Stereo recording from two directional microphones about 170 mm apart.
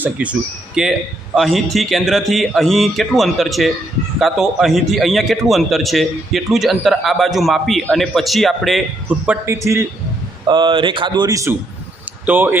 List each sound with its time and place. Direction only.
0.0 s a man's voice: 10° right (ahead or behind)
10.5 s speech: 30° right (ahead or behind); by 12.5 s 10° right (ahead or behind)